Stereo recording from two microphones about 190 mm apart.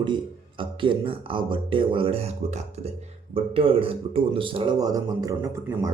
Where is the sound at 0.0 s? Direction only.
25° right (ahead or behind).